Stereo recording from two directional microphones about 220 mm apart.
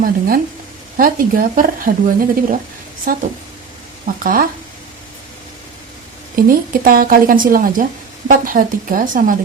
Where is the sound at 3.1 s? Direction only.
40° right (ahead or behind).